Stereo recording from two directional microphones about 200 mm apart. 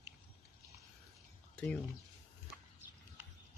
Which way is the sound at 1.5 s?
5° left (ahead or behind).